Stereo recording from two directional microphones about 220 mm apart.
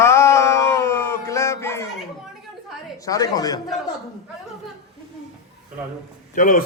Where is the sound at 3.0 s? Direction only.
15° left (ahead or behind).